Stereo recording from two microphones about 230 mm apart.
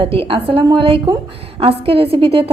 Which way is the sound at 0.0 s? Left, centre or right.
Right.